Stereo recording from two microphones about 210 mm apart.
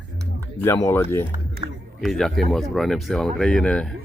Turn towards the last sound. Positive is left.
turn(degrees=5)  # may be behind; listen again after turning